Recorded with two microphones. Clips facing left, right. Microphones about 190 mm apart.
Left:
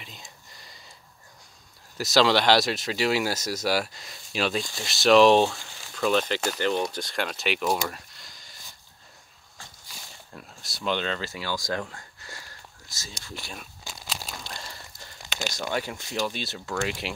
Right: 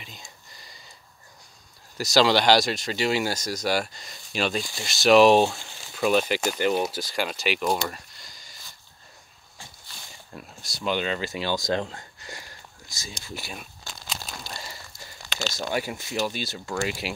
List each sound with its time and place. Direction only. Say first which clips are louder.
0.0 s a sound: even; centre (ahead or behind)
2.0 s speech: right 1 dB; centre (ahead or behind)
10.3 s speech: right 4 dB; centre (ahead or behind)
13.8 s crumpling: left 1 dB; 5° left (ahead or behind)
14.4 s a sound: right 1 dB; 5° right (ahead or behind)
15.7 s speech: right 2 dB; 10° right (ahead or behind)